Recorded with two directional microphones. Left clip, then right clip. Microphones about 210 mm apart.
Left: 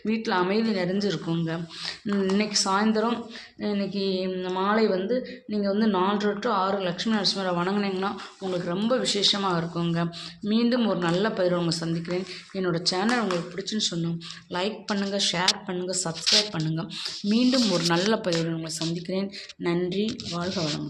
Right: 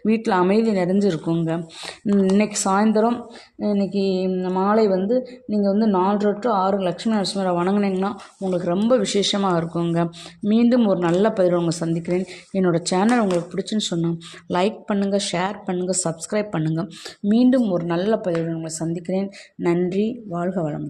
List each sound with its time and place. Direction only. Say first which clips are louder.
0.1 s a woman's voice: right 6 dB; 40° right (ahead or behind)
14.8 s a woman's voice: right 4 dB; 25° right (ahead or behind)
17.7 s speech: right 2 dB; 15° right (ahead or behind)